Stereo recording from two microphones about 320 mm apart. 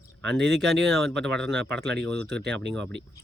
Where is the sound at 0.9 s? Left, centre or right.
Centre.